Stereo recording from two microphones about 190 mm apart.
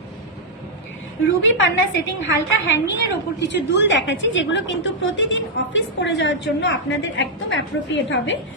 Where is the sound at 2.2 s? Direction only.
80° left.